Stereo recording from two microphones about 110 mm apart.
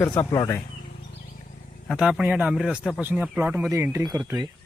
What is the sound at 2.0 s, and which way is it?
Speech, 10° right (ahead or behind).